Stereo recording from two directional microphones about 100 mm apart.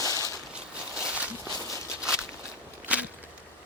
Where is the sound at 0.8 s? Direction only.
10° right (ahead or behind).